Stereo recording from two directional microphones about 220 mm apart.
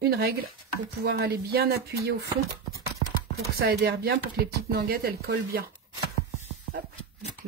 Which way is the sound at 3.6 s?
45° right (ahead or behind).